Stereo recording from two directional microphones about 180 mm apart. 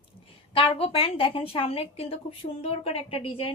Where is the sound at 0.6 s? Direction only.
30° left (ahead or behind).